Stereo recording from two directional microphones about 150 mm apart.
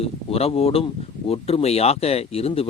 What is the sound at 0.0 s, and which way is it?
Speech, 40° left (ahead or behind).